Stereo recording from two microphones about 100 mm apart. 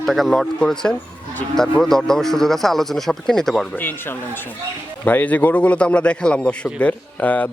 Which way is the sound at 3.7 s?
20° left (ahead or behind).